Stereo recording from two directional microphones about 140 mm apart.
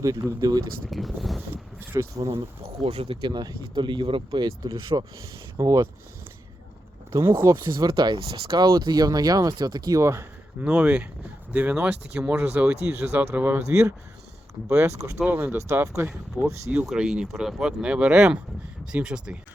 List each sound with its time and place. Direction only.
0.0 s speech: 20° right (ahead or behind)
0.9 s speech: centre (ahead or behind)
1.9 s speech: 20° right (ahead or behind)
2.8 s speech: 45° right (ahead or behind); by 5.9 s 20° right (ahead or behind)
7.1 s speech: 20° right (ahead or behind)
7.6 s speech: 30° right (ahead or behind)
10.6 s speech: 5° right (ahead or behind)
16.0 s speech: 5° right (ahead or behind)